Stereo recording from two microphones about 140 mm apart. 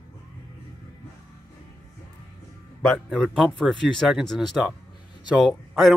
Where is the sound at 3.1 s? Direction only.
5° left (ahead or behind).